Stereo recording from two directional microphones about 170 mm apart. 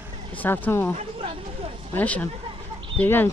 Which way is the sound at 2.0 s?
10° left (ahead or behind).